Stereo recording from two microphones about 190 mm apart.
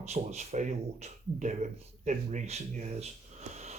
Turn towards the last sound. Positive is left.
turn(degrees=-35)  # may be behind; listen again after turning